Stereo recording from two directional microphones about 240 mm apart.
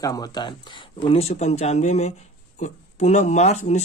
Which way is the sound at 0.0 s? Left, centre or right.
Centre.